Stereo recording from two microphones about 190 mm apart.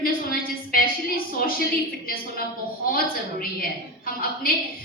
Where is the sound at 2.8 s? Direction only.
50° left (ahead or behind).